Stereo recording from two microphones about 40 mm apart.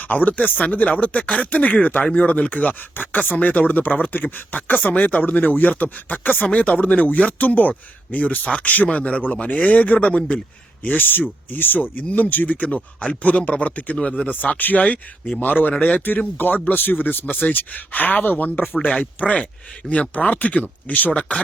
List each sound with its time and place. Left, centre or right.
0.0 s speech: left
2.9 s speech: left
10.8 s speech: left
19.2 s speech: left
21.1 s speech: left